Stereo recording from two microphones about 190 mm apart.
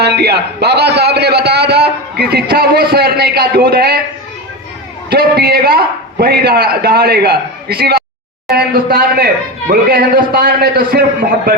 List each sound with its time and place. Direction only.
0.0 s a man's voice: 60° right (ahead or behind)
5.0 s a man's voice: 55° right (ahead or behind)